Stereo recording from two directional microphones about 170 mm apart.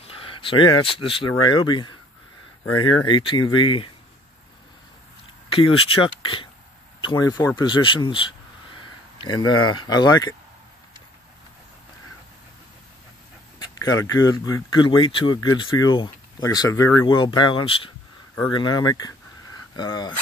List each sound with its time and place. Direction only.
0.0 s speech: 30° left (ahead or behind)
3.1 s speech: 30° left (ahead or behind)
5.5 s speech: 30° left (ahead or behind)
9.2 s speech: 25° left (ahead or behind)
13.6 s speech: 20° left (ahead or behind)